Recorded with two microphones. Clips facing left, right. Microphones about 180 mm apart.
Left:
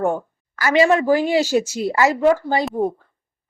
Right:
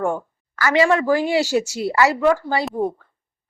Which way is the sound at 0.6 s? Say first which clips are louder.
Left 1 dB; 20° left (ahead or behind).